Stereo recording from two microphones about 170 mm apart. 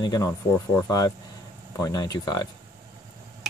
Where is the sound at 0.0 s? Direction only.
20° left (ahead or behind).